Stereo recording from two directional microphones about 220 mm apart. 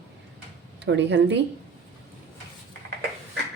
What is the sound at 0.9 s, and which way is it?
Speech, 55° right (ahead or behind).